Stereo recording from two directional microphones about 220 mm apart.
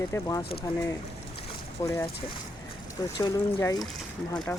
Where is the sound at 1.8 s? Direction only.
10° left (ahead or behind).